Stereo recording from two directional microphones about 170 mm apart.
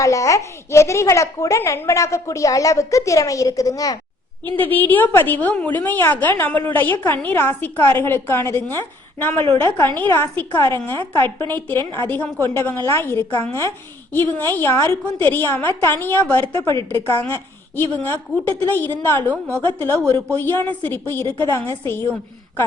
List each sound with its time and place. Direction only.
0.0 s a woman's voice: 20° left (ahead or behind)